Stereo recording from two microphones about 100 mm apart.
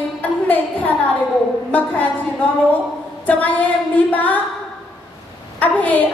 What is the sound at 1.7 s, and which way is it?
Speech, 15° left (ahead or behind).